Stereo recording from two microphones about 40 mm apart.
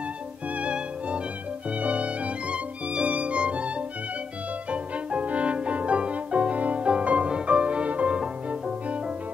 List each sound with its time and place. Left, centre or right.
0.6 s music: right